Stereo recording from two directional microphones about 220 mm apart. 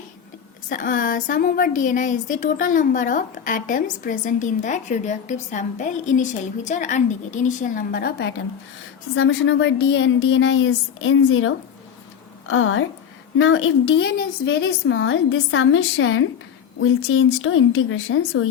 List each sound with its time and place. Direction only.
0.7 s a woman's voice: 40° left (ahead or behind)
9.1 s a woman's voice: 60° left (ahead or behind)